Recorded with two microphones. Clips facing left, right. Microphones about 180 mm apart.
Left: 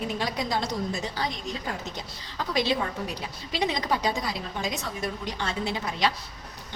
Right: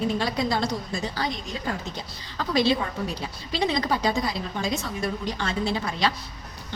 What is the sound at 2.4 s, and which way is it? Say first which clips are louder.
A woman's voice: right 3 dB; 15° left (ahead or behind).